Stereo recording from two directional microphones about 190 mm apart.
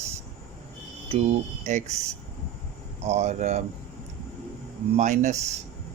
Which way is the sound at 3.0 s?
35° right (ahead or behind).